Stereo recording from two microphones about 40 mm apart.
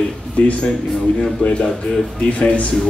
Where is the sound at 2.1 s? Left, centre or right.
Left.